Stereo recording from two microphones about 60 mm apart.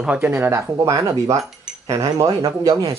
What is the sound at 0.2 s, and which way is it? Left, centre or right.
Speech, right.